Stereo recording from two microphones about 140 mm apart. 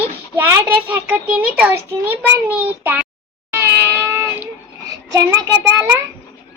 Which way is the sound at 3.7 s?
15° right (ahead or behind).